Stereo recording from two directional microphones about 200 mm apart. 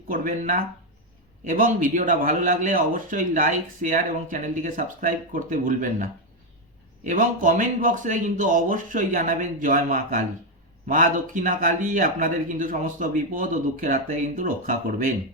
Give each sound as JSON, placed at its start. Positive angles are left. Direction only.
{"t": 0.1, "sound": "a man's voice", "side_deg": -40}